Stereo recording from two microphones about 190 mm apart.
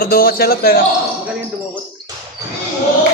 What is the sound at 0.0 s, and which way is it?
Speech, 50° left (ahead or behind).